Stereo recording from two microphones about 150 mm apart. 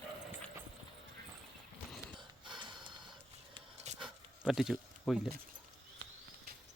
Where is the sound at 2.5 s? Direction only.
30° right (ahead or behind).